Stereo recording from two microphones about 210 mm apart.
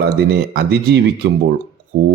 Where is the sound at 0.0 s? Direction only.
50° right (ahead or behind).